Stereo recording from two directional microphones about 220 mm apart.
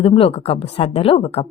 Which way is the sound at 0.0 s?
25° left (ahead or behind).